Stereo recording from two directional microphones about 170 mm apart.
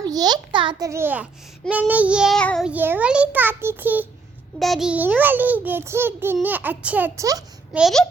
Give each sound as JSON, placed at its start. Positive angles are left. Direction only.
{"t": 0.0, "sound": "a child's voice", "side_deg": -25}
{"t": 1.7, "sound": "child singing", "side_deg": -10}
{"t": 2.6, "sound": "a child's voice", "side_deg": -10}
{"t": 7.7, "sound": "child singing", "side_deg": 0}